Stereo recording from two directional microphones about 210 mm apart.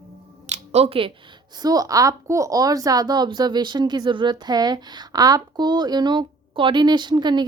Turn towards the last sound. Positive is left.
turn(degrees=-20)  # may be behind; listen again after turning